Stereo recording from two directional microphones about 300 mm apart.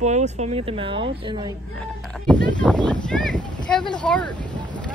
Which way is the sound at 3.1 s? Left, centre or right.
Centre.